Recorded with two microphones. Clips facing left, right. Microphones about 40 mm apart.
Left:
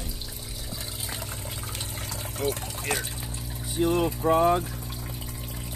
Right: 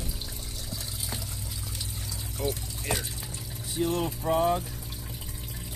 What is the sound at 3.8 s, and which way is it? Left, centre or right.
Speech, left.